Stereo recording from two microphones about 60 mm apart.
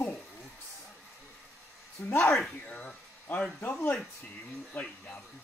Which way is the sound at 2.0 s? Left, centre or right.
Left.